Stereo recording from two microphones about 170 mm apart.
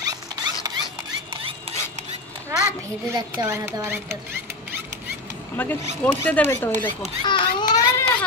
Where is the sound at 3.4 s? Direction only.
15° right (ahead or behind).